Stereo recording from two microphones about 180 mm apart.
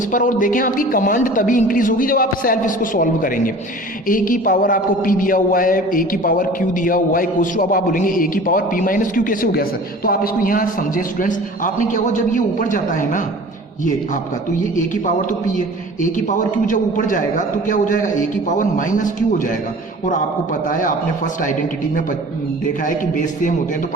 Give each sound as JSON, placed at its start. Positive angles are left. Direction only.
{"t": 0.1, "sound": "a man's voice", "side_deg": 45}
{"t": 15.5, "sound": "a man's voice", "side_deg": 45}
{"t": 20.7, "sound": "a man's voice", "side_deg": 50}
{"t": 23.1, "sound": "a man's voice", "side_deg": 45}